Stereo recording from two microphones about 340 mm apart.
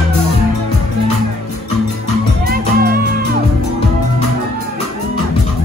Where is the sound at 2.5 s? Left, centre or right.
Right.